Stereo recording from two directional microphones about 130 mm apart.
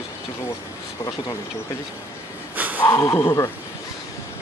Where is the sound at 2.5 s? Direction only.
15° right (ahead or behind).